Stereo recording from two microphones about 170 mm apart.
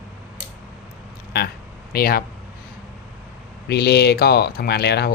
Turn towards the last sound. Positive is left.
turn(degrees=70)  # may be behind; listen again after turning